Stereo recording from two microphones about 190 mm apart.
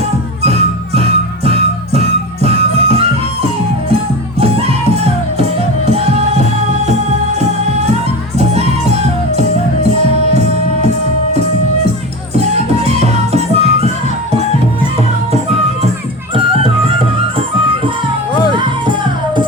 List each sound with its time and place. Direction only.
0.9 s music: 30° right (ahead or behind)
4.4 s music: 30° right (ahead or behind)
8.4 s music: 35° right (ahead or behind)
12.8 s music: 35° right (ahead or behind)